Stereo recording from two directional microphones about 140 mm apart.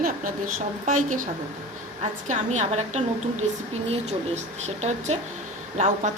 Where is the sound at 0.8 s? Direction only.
65° right (ahead or behind).